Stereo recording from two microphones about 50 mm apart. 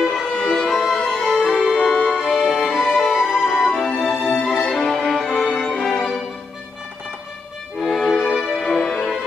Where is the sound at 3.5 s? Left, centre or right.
Centre.